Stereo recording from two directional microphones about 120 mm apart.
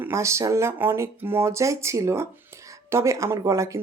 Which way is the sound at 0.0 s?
25° right (ahead or behind).